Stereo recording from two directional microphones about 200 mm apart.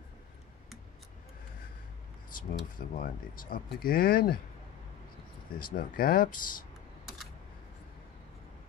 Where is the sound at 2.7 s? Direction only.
45° left (ahead or behind).